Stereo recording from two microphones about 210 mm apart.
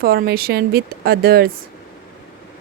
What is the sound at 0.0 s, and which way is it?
A woman's voice, 45° right (ahead or behind).